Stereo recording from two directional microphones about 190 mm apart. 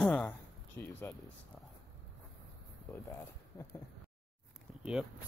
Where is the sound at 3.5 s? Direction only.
15° left (ahead or behind).